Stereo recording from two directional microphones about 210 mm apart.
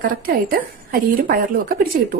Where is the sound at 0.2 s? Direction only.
45° right (ahead or behind).